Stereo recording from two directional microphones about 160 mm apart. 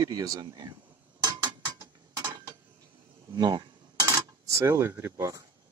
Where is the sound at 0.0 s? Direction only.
20° right (ahead or behind).